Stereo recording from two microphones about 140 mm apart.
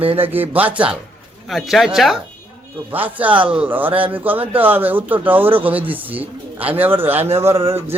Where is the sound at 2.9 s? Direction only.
10° right (ahead or behind).